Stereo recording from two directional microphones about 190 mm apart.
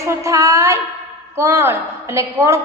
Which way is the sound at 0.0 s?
15° right (ahead or behind).